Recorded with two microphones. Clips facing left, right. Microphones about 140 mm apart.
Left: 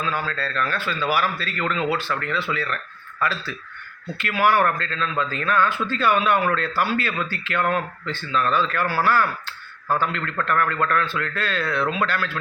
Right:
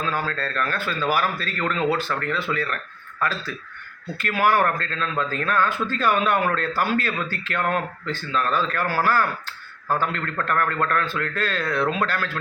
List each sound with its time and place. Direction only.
0.0 s a man's voice: 45° right (ahead or behind)
4.2 s a man's voice: 40° right (ahead or behind)